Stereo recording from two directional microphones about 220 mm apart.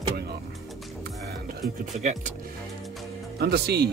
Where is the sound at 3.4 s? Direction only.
45° right (ahead or behind).